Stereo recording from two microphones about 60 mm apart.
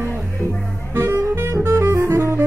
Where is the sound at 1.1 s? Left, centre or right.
Right.